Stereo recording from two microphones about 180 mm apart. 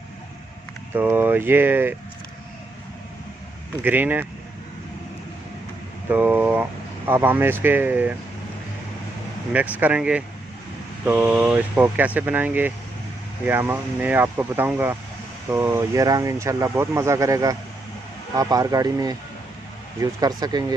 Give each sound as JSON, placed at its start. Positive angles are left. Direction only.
{"t": 0.9, "sound": "speech", "side_deg": -10}
{"t": 3.8, "sound": "speech", "side_deg": -10}
{"t": 6.1, "sound": "a sound", "side_deg": -10}
{"t": 7.1, "sound": "speech", "side_deg": -10}
{"t": 9.5, "sound": "speech", "side_deg": -10}